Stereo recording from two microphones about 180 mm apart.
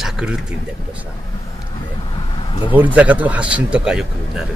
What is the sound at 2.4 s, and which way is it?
Vehicle, 25° left (ahead or behind).